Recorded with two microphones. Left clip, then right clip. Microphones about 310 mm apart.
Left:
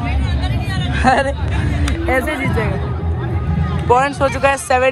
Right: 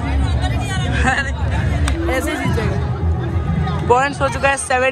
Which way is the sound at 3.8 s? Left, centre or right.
Centre.